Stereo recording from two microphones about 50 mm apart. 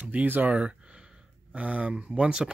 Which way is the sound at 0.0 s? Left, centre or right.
Right.